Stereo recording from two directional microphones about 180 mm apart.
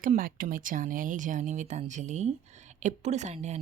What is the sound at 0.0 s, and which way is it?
Speech, 50° right (ahead or behind).